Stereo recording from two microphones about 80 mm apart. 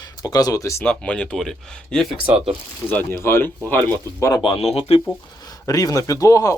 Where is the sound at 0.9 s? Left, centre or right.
Centre.